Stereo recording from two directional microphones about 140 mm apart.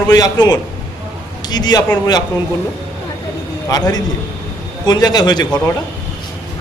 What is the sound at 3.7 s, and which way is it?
A man's voice, 25° left (ahead or behind).